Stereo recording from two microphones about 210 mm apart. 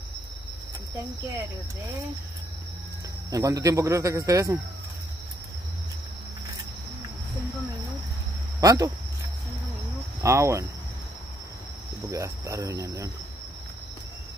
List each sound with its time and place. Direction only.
3.3 s speech: 15° right (ahead or behind)
8.5 s speech: 15° right (ahead or behind)
10.2 s speech: 15° right (ahead or behind)
12.1 s speech: 15° right (ahead or behind)